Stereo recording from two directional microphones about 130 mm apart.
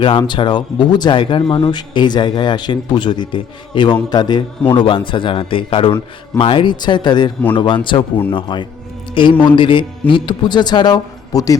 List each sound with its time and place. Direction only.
0.0 s speech: 40° left (ahead or behind)